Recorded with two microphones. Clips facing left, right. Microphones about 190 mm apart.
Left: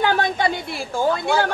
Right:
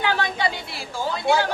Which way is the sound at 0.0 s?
50° left (ahead or behind).